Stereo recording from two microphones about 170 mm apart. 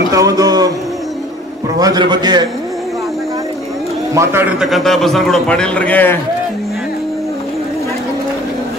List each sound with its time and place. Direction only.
0.1 s music: 20° right (ahead or behind)
1.8 s a man's voice: 25° right (ahead or behind)
4.1 s a man's voice: 15° right (ahead or behind); by 6.1 s 10° left (ahead or behind)